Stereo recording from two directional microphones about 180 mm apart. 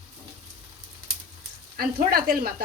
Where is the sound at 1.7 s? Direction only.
55° right (ahead or behind).